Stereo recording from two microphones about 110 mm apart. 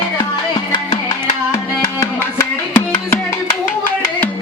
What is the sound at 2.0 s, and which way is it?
Tabla, 25° left (ahead or behind).